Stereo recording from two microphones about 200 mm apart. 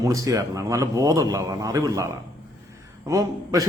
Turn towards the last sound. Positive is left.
turn(degrees=-15)  # may be behind; listen again after turning